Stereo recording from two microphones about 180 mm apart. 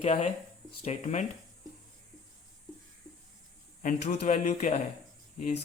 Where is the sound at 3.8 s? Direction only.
40° left (ahead or behind).